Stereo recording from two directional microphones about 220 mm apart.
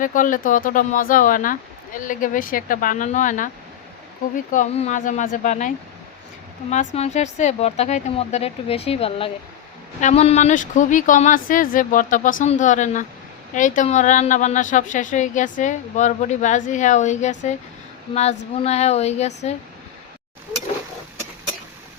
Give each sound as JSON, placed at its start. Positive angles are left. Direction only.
{"t": 0.0, "sound": "a woman's voice", "side_deg": 35}
{"t": 4.5, "sound": "a woman's voice", "side_deg": 30}